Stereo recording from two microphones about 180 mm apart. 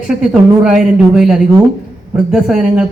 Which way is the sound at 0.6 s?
5° right (ahead or behind).